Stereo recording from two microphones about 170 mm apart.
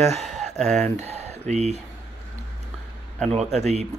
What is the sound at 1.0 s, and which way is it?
Speech, 40° right (ahead or behind).